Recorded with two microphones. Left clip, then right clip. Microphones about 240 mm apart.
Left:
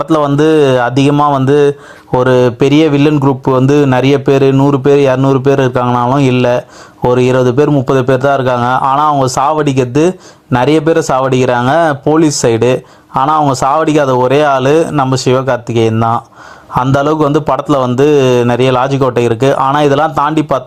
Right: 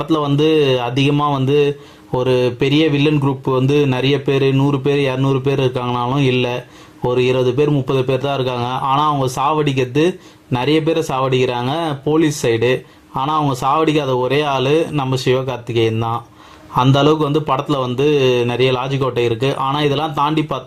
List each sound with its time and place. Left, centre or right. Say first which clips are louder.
0.1 s a man's voice: left 6 dB; left